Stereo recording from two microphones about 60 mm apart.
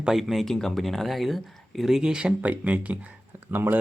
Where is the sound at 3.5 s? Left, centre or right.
Right.